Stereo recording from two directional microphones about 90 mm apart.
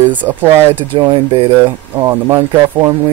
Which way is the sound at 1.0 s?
50° right (ahead or behind).